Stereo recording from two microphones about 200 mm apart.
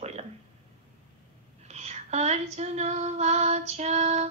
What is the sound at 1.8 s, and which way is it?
Female singing, 35° right (ahead or behind).